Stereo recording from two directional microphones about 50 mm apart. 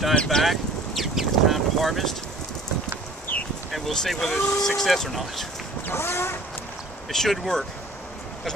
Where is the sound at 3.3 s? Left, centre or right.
Left.